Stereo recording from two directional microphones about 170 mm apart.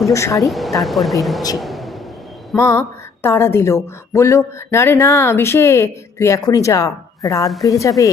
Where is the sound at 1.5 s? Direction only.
Centre (ahead or behind).